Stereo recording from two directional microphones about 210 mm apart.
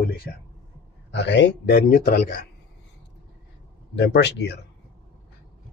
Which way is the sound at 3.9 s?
55° left (ahead or behind).